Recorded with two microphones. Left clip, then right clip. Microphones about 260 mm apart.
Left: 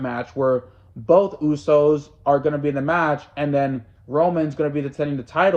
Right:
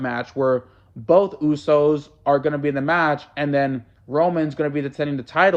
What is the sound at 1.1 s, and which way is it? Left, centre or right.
Speech, centre.